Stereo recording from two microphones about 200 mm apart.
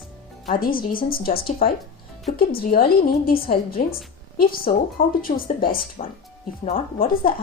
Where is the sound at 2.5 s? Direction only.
45° left (ahead or behind).